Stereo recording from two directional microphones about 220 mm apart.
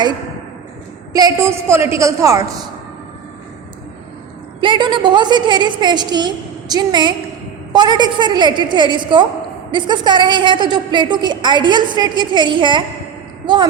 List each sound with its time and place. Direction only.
1.1 s a woman's voice: 15° right (ahead or behind)
4.6 s a woman's voice: 20° right (ahead or behind)